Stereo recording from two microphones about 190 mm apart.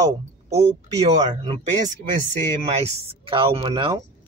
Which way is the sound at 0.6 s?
30° right (ahead or behind).